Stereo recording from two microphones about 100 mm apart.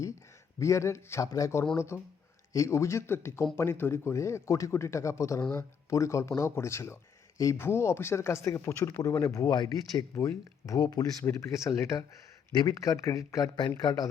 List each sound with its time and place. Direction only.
0.6 s speech: 30° left (ahead or behind)
11.2 s speech: 30° left (ahead or behind)